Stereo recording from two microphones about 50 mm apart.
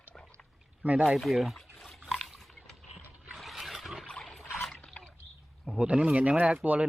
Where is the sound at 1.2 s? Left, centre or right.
Centre.